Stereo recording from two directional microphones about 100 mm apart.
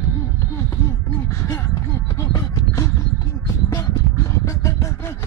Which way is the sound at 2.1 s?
30° left (ahead or behind).